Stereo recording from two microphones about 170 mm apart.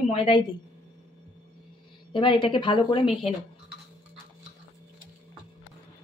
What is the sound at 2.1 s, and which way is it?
A woman's voice, 30° left (ahead or behind).